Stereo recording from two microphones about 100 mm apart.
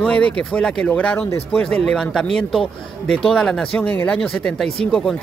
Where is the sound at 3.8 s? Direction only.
20° left (ahead or behind).